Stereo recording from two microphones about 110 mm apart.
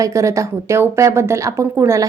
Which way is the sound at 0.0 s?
30° right (ahead or behind).